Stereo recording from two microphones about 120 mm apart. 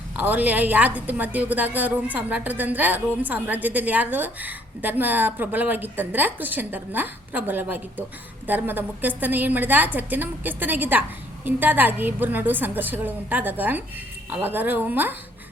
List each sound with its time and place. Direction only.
0.2 s a woman's voice: 15° right (ahead or behind)